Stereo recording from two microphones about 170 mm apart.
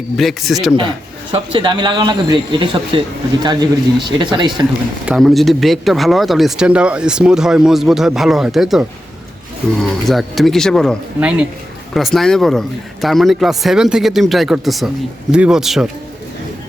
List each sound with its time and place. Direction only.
0.2 s speech: centre (ahead or behind)
1.3 s speech: 30° right (ahead or behind)
5.0 s speech: centre (ahead or behind)
10.1 s speech: centre (ahead or behind)